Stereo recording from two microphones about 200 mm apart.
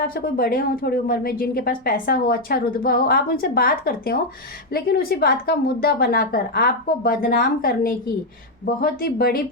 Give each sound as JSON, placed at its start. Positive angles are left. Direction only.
{"t": 0.1, "sound": "a woman's voice", "side_deg": 50}